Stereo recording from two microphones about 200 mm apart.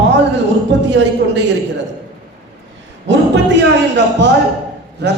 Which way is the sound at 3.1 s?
60° right (ahead or behind).